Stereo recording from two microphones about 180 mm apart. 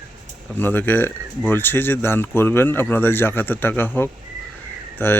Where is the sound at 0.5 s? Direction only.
10° left (ahead or behind).